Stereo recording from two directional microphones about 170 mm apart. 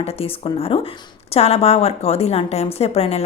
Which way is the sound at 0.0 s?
35° left (ahead or behind).